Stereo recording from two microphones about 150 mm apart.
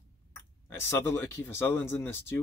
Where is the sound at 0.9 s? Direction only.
20° left (ahead or behind).